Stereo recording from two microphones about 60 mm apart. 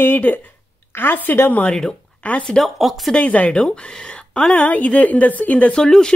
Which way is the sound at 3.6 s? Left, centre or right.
Centre.